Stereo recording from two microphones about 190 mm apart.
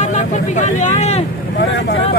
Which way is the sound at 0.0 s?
40° left (ahead or behind).